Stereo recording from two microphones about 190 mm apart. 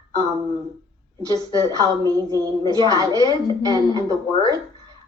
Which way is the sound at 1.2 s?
20° right (ahead or behind).